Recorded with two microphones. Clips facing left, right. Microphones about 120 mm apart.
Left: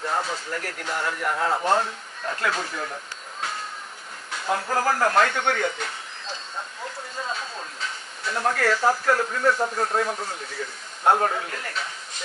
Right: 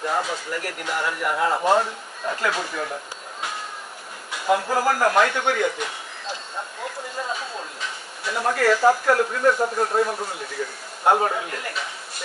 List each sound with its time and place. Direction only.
0.1 s speech: 5° right (ahead or behind)
4.5 s speech: 10° right (ahead or behind)
8.3 s speech: 5° right (ahead or behind)